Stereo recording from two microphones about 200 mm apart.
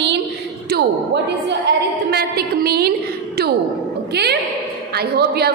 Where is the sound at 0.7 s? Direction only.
60° right (ahead or behind).